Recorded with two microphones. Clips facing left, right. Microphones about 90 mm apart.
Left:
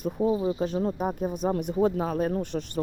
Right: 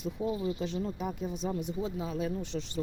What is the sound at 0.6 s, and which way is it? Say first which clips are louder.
A woman's voice: left 7 dB; 50° left (ahead or behind).